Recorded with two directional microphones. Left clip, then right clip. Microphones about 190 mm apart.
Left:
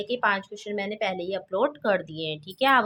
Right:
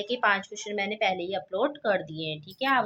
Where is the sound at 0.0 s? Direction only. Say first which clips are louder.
Even; 15° left (ahead or behind).